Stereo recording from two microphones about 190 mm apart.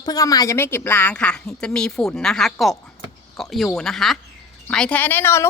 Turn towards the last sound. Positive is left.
turn(degrees=15)  # may be behind; listen again after turning